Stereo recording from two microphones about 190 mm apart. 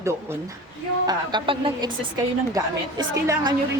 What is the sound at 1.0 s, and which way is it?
A woman's voice, 25° right (ahead or behind).